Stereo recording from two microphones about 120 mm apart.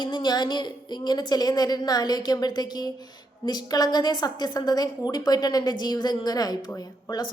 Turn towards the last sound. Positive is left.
turn(degrees=35)  # may be behind; listen again after turning